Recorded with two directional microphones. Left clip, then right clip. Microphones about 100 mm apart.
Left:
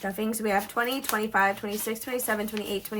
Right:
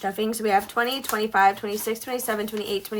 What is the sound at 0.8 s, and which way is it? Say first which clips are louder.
Speech: right 3 dB; 15° right (ahead or behind).